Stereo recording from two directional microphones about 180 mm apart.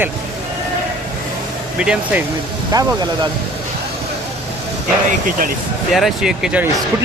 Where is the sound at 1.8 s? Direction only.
5° right (ahead or behind).